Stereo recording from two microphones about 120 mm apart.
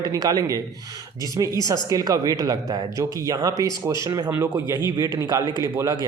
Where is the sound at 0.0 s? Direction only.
30° right (ahead or behind).